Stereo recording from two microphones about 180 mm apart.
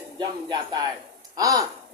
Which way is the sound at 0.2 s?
25° right (ahead or behind).